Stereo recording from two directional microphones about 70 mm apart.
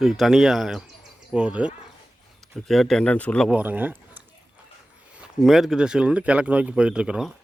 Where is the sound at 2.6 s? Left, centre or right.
Centre.